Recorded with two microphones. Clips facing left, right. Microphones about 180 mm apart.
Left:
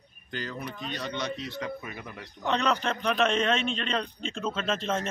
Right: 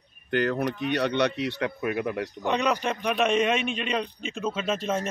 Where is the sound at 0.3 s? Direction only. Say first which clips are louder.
Right 11 dB; 65° right (ahead or behind).